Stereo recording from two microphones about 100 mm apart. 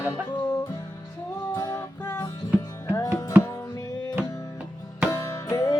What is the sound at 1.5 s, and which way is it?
Music, 30° left (ahead or behind).